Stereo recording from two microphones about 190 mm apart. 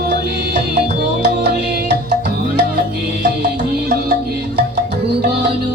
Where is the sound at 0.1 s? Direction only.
60° right (ahead or behind).